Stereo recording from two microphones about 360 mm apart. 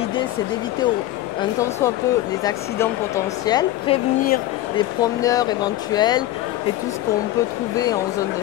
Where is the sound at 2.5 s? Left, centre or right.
Centre.